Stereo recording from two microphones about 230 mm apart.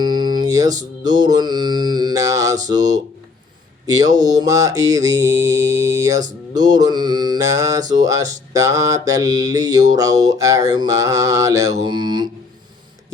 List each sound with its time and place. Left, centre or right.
0.0 s music: centre
1.0 s mantra: centre